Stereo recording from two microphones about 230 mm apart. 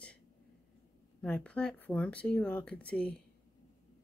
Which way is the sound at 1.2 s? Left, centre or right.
Centre.